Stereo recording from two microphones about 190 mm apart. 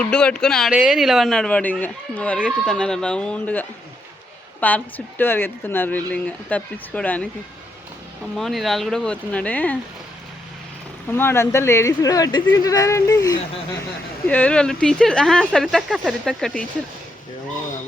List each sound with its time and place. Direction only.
0.0 s speech: 5° left (ahead or behind)
8.4 s speech: centre (ahead or behind)
11.1 s speech: 10° left (ahead or behind)
14.3 s speech: 5° left (ahead or behind)